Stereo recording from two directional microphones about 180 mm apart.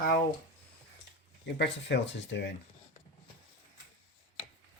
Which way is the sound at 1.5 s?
75° left (ahead or behind).